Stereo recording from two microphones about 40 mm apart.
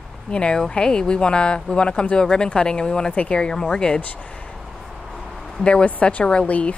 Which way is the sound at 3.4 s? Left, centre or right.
Centre.